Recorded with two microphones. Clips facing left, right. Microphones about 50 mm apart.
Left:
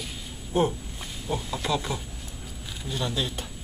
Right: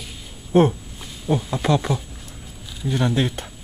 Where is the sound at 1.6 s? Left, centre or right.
Right.